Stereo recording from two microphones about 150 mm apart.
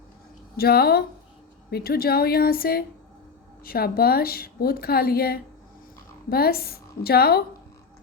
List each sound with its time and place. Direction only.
0.5 s a woman's voice: 90° left